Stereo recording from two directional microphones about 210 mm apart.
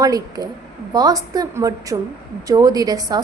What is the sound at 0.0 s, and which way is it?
A woman's voice, 15° right (ahead or behind).